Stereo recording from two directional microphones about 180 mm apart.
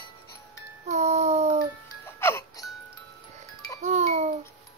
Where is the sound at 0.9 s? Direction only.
40° right (ahead or behind).